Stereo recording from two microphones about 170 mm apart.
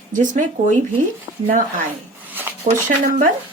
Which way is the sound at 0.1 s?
50° right (ahead or behind).